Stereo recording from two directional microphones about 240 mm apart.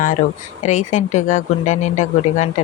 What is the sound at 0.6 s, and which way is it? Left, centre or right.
A woman's voice, left.